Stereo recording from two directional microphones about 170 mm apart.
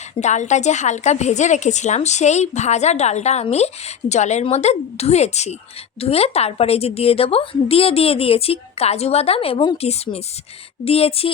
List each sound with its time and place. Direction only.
0.2 s a woman's voice: 45° left (ahead or behind)